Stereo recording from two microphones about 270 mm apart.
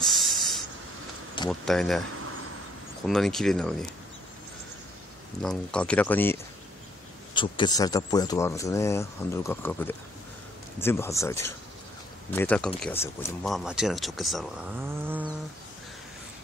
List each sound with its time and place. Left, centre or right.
0.0 s hiss: centre
1.4 s a sound: centre
1.7 s speech: centre
3.1 s speech: centre
5.4 s speech: centre